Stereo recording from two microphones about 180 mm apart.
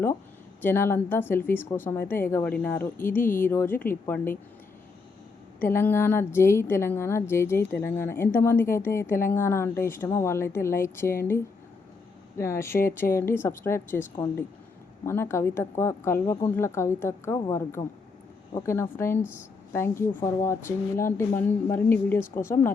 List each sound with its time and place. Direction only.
0.6 s a woman's voice: 10° left (ahead or behind)
5.5 s a woman's voice: 10° left (ahead or behind)
12.4 s a woman's voice: 15° left (ahead or behind)
15.0 s a woman's voice: 15° left (ahead or behind)